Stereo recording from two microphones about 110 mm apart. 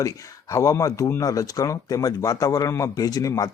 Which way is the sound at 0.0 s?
30° left (ahead or behind).